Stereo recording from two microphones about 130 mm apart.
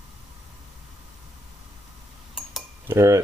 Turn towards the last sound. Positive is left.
turn(degrees=-20)  # may be behind; listen again after turning